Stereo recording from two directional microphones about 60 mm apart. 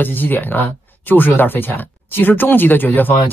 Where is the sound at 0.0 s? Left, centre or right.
Left.